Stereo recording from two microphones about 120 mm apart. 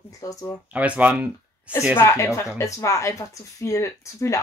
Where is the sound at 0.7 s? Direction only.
10° right (ahead or behind).